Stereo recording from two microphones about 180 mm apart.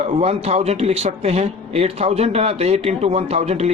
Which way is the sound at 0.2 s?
35° right (ahead or behind).